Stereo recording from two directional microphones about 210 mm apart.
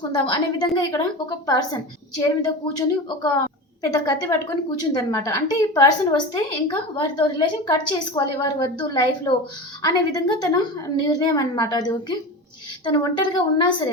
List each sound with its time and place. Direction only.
0.1 s a woman's voice: 20° left (ahead or behind)
3.8 s a woman's voice: 15° left (ahead or behind)